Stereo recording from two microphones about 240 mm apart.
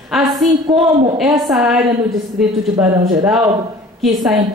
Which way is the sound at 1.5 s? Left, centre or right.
Centre.